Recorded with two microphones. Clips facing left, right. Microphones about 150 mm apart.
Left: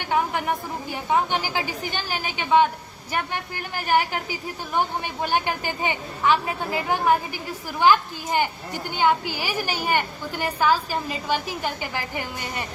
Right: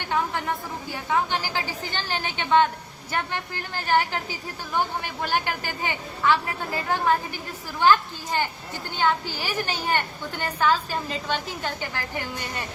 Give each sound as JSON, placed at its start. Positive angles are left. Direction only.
{"t": 0.1, "sound": "a woman's voice", "side_deg": 15}